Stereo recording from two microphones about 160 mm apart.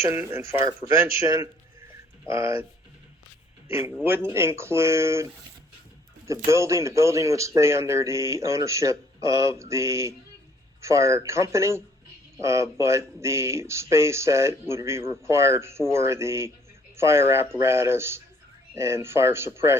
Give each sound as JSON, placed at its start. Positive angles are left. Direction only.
{"t": 0.0, "sound": "speech", "side_deg": -15}
{"t": 4.3, "sound": "a man's voice", "side_deg": -15}